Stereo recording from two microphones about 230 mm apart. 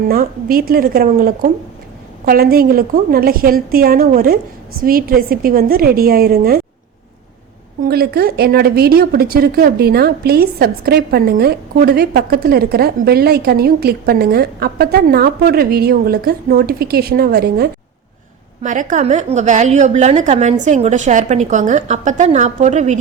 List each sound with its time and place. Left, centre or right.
0.1 s a woman's voice: right
7.9 s a woman's voice: right
18.6 s a woman's voice: right